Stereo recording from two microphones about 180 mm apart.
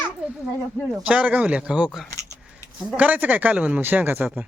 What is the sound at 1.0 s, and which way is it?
A man's voice, 5° right (ahead or behind).